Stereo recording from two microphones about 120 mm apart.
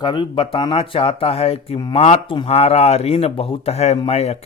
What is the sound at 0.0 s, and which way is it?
Speech, 40° left (ahead or behind).